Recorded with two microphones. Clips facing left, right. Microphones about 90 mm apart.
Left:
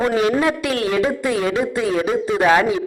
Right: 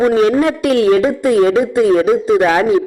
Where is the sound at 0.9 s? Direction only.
45° right (ahead or behind).